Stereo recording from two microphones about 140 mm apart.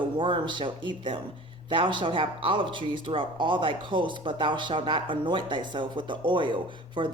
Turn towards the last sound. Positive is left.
turn(degrees=-35)  # may be behind; listen again after turning